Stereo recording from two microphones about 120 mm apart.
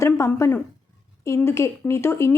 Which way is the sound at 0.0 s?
25° left (ahead or behind).